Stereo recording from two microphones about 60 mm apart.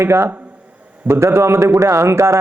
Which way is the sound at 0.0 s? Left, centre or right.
Right.